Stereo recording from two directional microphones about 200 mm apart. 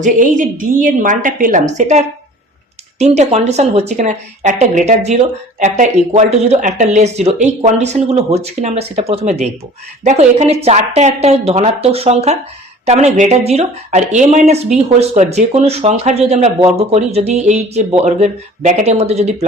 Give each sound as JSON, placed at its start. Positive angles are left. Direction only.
{"t": 0.0, "sound": "speech", "side_deg": -40}